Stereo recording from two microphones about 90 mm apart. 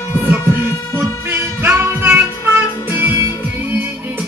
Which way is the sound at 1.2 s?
25° right (ahead or behind).